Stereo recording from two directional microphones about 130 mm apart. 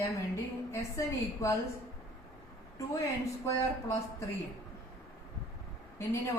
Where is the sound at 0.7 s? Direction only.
25° left (ahead or behind).